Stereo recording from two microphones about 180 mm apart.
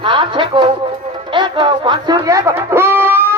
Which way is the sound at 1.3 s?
25° right (ahead or behind).